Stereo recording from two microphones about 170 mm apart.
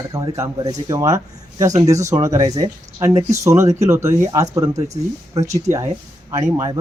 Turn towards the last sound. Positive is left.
turn(degrees=-25)  # may be behind; listen again after turning